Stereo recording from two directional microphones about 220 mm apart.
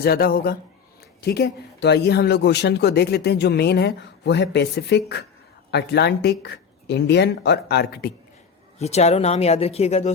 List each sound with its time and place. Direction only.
0.0 s speech: 45° left (ahead or behind)
8.8 s speech: 30° left (ahead or behind)